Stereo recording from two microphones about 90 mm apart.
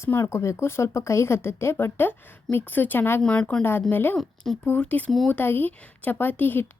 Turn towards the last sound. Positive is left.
turn(degrees=20)  # may be behind; listen again after turning